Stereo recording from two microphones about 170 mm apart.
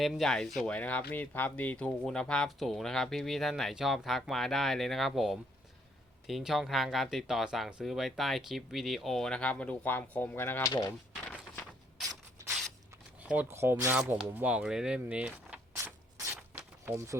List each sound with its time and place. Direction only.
0.0 s speech: centre (ahead or behind); by 10.9 s 20° left (ahead or behind)
13.2 s speech: 10° right (ahead or behind)
15.7 s a sound: 15° right (ahead or behind)
16.8 s speech: 15° right (ahead or behind)